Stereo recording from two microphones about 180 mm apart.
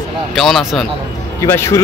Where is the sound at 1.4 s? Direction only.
15° left (ahead or behind).